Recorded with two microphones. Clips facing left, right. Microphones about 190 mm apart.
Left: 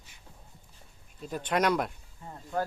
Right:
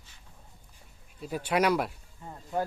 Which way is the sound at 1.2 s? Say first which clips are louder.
Right 1 dB; 10° right (ahead or behind).